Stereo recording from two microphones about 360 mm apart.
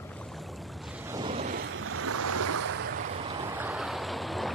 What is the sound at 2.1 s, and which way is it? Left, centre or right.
Waves, right.